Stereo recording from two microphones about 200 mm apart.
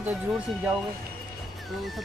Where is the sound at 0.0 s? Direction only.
5° right (ahead or behind).